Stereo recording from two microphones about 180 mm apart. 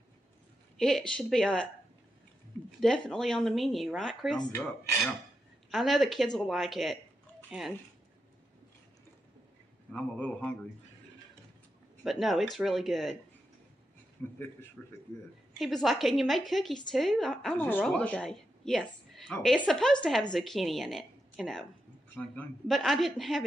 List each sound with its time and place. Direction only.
0.7 s a woman's voice: centre (ahead or behind)
2.8 s a woman's voice: 5° left (ahead or behind)
5.7 s a woman's voice: centre (ahead or behind)
9.9 s a man's voice: 10° left (ahead or behind)
12.0 s a woman's voice: centre (ahead or behind)
14.2 s a man's voice: 10° left (ahead or behind)